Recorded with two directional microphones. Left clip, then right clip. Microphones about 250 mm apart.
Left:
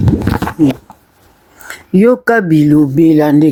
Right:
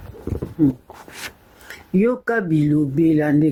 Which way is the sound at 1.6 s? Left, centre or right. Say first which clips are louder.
Left 10 dB; left.